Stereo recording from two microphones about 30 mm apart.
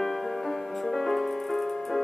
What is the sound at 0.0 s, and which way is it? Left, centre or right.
Music, centre.